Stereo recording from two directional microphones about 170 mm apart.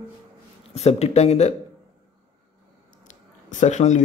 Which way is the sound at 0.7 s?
40° left (ahead or behind).